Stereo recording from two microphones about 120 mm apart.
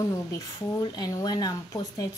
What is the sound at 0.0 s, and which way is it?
A woman's voice, 25° left (ahead or behind).